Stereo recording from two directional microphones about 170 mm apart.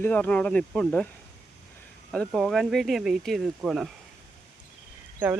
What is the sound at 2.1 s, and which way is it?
Speech, centre (ahead or behind).